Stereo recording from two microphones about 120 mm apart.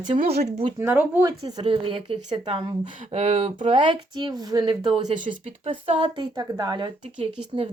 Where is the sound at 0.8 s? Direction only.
20° right (ahead or behind).